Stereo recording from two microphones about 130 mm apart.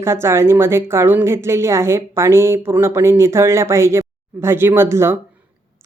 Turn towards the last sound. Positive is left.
turn(degrees=-20)  # may be behind; listen again after turning